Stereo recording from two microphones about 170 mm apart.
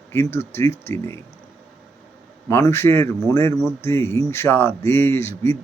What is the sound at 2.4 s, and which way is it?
A man's voice, 15° left (ahead or behind).